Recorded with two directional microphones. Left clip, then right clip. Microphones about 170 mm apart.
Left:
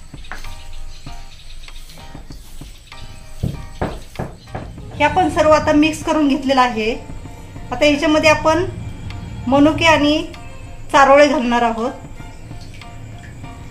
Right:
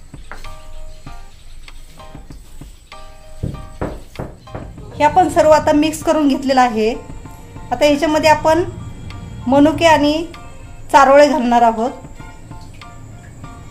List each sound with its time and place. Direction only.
4.1 s music: centre (ahead or behind)
4.9 s a woman's voice: 45° right (ahead or behind)